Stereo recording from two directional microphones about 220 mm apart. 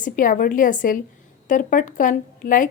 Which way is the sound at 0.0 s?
35° left (ahead or behind).